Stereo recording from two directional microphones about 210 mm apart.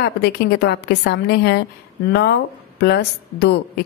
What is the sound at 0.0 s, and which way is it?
A woman's voice, 50° left (ahead or behind).